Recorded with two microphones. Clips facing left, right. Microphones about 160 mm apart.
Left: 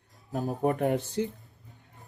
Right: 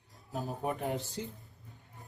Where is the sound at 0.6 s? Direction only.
70° left (ahead or behind).